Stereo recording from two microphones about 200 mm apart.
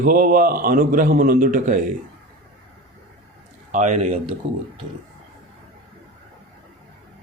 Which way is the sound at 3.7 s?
40° right (ahead or behind).